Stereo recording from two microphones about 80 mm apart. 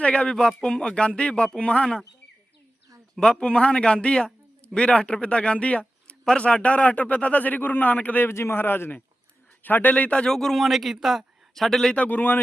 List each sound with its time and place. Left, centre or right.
0.0 s speech: centre
3.2 s a man's voice: centre
11.9 s a man's voice: left